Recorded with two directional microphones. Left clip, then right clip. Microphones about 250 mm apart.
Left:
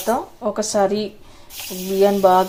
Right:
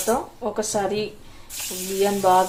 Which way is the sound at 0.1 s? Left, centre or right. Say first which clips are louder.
Left 3 dB; left.